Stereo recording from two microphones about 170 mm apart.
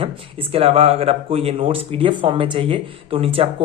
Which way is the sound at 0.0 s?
30° right (ahead or behind).